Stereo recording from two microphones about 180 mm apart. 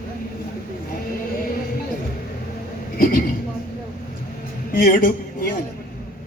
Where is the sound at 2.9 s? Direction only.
55° left (ahead or behind).